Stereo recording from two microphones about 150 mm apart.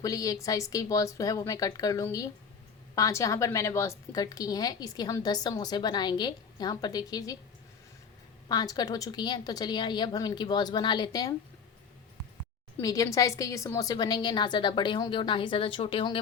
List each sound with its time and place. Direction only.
0.0 s a woman's voice: 25° left (ahead or behind)
8.4 s a woman's voice: 25° left (ahead or behind)
12.8 s a woman's voice: 25° left (ahead or behind)